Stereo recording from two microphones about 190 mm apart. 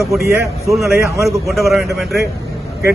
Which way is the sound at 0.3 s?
15° right (ahead or behind).